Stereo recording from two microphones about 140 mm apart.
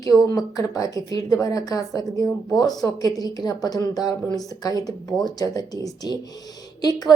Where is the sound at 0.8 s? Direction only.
25° left (ahead or behind).